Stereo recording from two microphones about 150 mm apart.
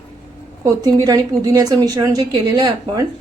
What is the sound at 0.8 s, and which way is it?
A woman's voice, 25° right (ahead or behind).